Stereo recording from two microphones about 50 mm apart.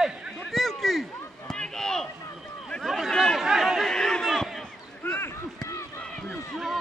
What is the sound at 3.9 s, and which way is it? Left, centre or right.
Chatter, centre.